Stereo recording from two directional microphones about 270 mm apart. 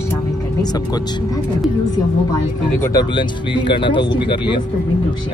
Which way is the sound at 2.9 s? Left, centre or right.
Centre.